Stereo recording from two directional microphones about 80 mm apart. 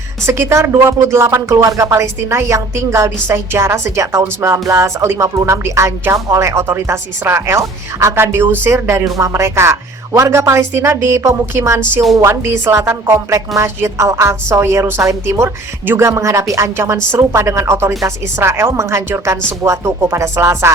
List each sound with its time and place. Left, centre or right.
0.3 s speech: right